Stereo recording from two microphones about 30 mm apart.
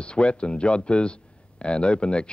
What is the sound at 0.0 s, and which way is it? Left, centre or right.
A man's voice, left.